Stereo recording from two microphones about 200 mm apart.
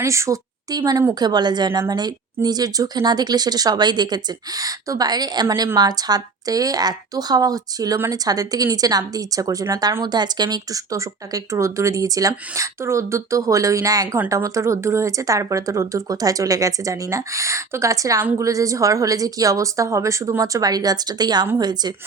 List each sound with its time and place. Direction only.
0.0 s speech: 15° right (ahead or behind)